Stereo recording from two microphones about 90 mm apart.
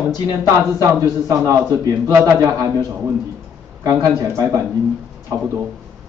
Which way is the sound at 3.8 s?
35° right (ahead or behind).